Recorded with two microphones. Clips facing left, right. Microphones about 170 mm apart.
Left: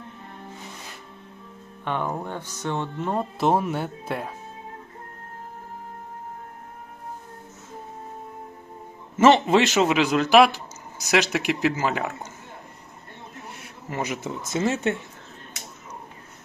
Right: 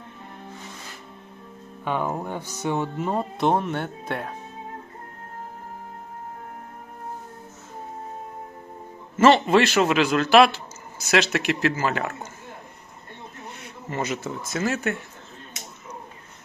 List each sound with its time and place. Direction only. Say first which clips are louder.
1.8 s speech: right 1 dB; 5° right (ahead or behind)
9.1 s speech: even; 20° left (ahead or behind)
13.9 s speech: right 1 dB; 15° left (ahead or behind)
14.5 s speech: left 2 dB; 25° left (ahead or behind)